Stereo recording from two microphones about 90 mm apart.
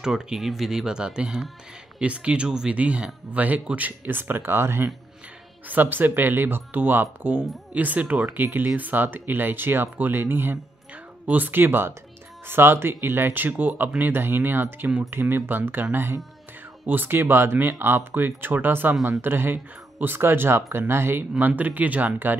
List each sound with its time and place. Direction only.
0.0 s speech: 5° right (ahead or behind)